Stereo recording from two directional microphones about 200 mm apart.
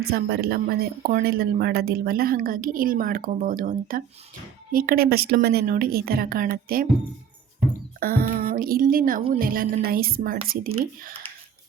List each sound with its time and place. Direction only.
0.1 s speech: 50° right (ahead or behind)
7.9 s speech: 45° right (ahead or behind)